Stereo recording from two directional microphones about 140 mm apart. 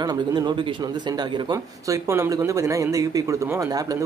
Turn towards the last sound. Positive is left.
turn(degrees=-25)  # may be behind; listen again after turning